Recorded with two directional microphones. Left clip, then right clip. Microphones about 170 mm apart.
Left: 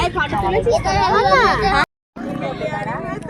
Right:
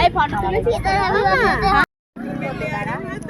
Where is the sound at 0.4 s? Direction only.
15° right (ahead or behind).